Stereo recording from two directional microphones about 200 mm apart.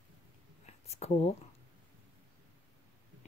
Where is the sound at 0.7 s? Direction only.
35° left (ahead or behind).